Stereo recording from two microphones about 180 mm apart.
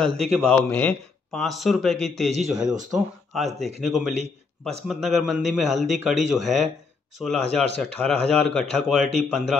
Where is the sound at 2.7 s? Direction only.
45° right (ahead or behind).